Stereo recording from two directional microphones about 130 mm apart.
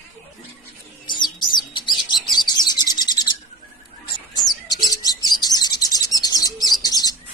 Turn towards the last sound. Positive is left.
turn(degrees=30)  # may be behind; listen again after turning